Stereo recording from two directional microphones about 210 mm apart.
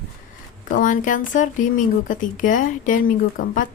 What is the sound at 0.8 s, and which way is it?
Speech, 40° left (ahead or behind).